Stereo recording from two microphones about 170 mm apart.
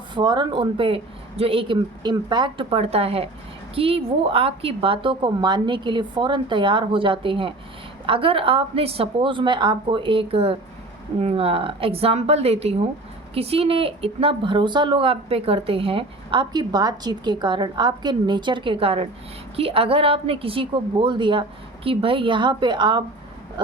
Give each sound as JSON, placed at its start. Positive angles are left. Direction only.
{"t": 0.1, "sound": "a woman's voice", "side_deg": -25}